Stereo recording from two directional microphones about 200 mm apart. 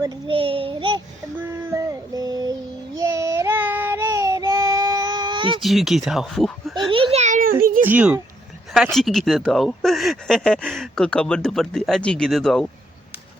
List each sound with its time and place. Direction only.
0.0 s a child's voice: 25° right (ahead or behind)
1.7 s child singing: 15° right (ahead or behind)
5.5 s speech: centre (ahead or behind)
6.9 s children playing: 30° right (ahead or behind)
7.6 s a sound: 45° right (ahead or behind)
7.9 s speech: 5° right (ahead or behind)